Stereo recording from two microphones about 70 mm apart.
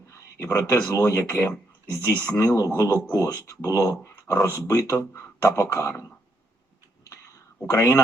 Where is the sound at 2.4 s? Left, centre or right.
Left.